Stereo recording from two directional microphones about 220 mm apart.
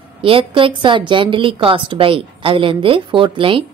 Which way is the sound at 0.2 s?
25° right (ahead or behind).